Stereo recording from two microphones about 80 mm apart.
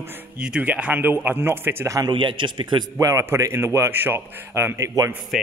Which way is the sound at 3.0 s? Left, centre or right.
Right.